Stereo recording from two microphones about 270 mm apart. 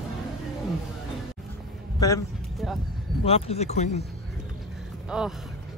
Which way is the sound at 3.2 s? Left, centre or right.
Left.